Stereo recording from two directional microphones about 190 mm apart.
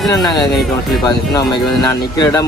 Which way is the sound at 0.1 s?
20° left (ahead or behind).